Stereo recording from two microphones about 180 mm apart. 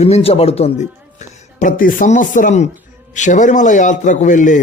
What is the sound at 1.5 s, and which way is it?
A man's voice, 50° left (ahead or behind).